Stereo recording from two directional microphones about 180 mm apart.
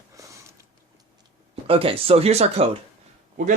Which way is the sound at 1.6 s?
30° right (ahead or behind).